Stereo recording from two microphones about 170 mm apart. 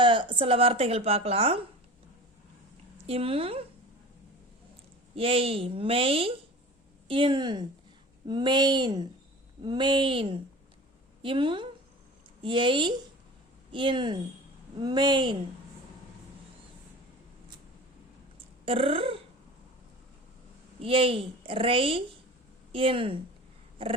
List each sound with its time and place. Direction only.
0.0 s a woman's voice: 30° right (ahead or behind)
3.1 s a woman's voice: 35° right (ahead or behind)
5.1 s a woman's voice: 35° right (ahead or behind)
18.3 s a sound: 35° right (ahead or behind)
20.8 s a woman's voice: 30° right (ahead or behind)